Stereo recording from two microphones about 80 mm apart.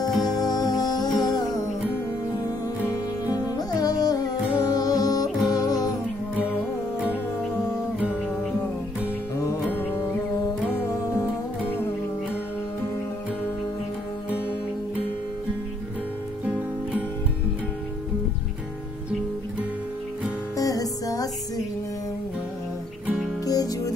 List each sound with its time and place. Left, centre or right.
0.3 s music: left
2.8 s music: right
3.5 s music: left
9.7 s music: left
10.9 s music: left
20.5 s music: left
23.4 s music: left